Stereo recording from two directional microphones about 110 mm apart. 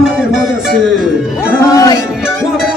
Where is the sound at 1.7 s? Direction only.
35° left (ahead or behind).